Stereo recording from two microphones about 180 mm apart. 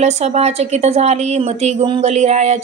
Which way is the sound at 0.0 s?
35° right (ahead or behind).